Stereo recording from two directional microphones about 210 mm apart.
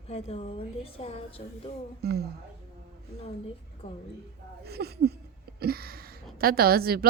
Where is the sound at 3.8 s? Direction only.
30° left (ahead or behind).